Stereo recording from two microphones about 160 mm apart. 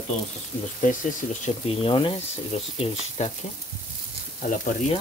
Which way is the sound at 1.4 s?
35° left (ahead or behind).